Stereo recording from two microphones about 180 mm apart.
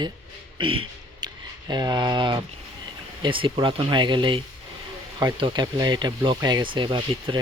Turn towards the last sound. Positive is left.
turn(degrees=-25)  # may be behind; listen again after turning